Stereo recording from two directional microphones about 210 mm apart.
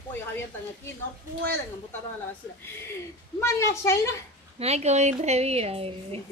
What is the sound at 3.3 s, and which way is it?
Speech, 15° left (ahead or behind).